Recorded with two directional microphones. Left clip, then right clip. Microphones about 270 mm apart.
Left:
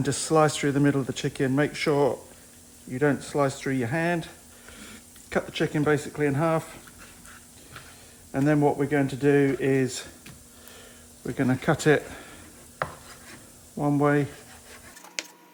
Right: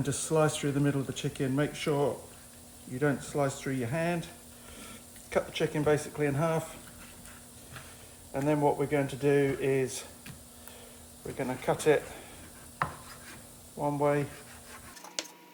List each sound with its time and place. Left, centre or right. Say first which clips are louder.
0.0 s speech: left 6 dB; left
8.3 s speech: left 4 dB; left
11.3 s speech: left 6 dB; left
13.8 s speech: left 5 dB; left
14.7 s tick-tock: left 1 dB; centre